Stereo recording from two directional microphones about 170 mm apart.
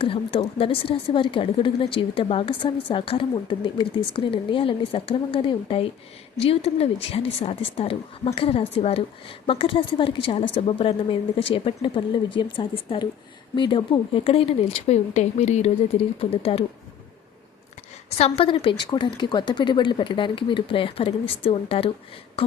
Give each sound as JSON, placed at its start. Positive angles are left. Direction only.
{"t": 0.0, "sound": "a woman's voice", "side_deg": 30}
{"t": 18.2, "sound": "a woman's voice", "side_deg": 35}
{"t": 22.4, "sound": "a sound", "side_deg": 35}